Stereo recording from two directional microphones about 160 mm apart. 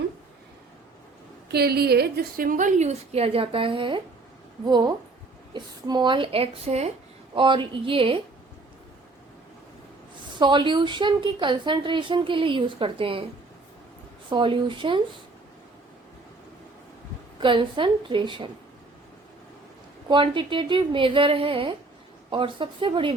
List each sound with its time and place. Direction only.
1.5 s a woman's voice: 85° right; by 6.9 s 40° right (ahead or behind)
7.3 s a woman's voice: 30° right (ahead or behind)
10.3 s a woman's voice: 30° right (ahead or behind)
14.3 s a woman's voice: 30° right (ahead or behind)
17.4 s a woman's voice: 30° right (ahead or behind)
20.1 s a woman's voice: 30° right (ahead or behind)